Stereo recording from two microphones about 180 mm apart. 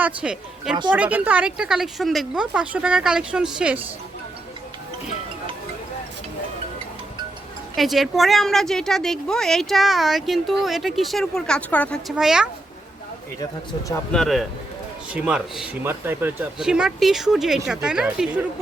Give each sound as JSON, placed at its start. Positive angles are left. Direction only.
{"t": 0.0, "sound": "speech", "side_deg": -5}
{"t": 7.8, "sound": "speech", "side_deg": 0}
{"t": 12.1, "sound": "speech", "side_deg": -5}
{"t": 13.4, "sound": "speech", "side_deg": 20}
{"t": 14.1, "sound": "speech", "side_deg": 0}